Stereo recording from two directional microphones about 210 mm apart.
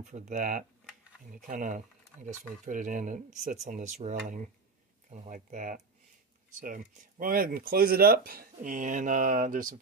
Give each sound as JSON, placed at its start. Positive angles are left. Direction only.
{"t": 0.0, "sound": "speech", "side_deg": -35}